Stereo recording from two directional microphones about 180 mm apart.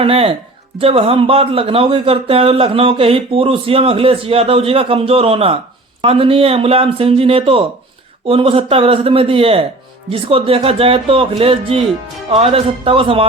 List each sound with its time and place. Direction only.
0.0 s speech: 30° right (ahead or behind)